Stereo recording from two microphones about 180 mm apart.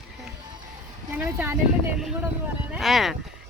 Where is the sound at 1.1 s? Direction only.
10° right (ahead or behind).